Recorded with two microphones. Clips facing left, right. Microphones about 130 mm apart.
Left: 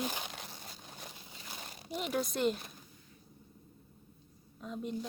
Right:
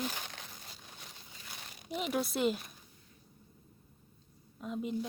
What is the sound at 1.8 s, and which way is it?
Speech, centre (ahead or behind).